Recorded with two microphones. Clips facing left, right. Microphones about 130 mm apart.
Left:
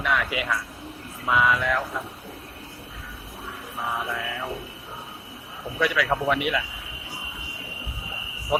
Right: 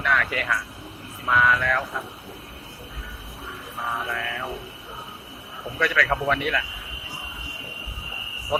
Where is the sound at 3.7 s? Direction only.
Centre (ahead or behind).